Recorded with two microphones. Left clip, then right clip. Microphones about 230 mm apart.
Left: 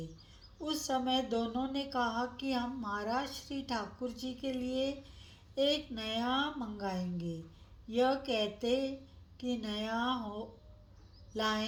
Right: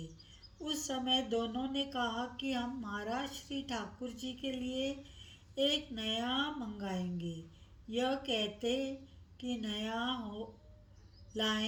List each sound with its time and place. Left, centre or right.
0.9 s speech: left